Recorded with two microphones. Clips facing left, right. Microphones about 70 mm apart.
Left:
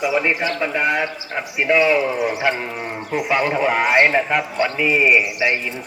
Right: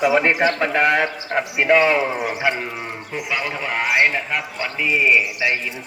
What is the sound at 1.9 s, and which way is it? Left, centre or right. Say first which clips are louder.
Speech: left 1 dB; right.